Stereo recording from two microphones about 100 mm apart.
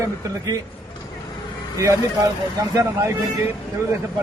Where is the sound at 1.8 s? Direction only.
30° right (ahead or behind).